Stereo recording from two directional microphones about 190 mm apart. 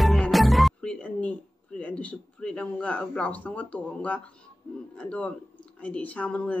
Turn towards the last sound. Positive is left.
turn(degrees=5)  # may be behind; listen again after turning